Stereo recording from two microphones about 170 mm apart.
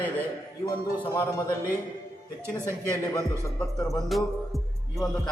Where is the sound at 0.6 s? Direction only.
25° left (ahead or behind).